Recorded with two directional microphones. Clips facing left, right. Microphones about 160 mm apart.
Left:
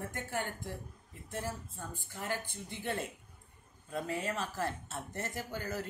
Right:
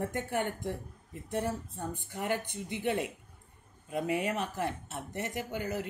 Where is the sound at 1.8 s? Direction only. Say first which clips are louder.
Right 6 dB; 20° right (ahead or behind).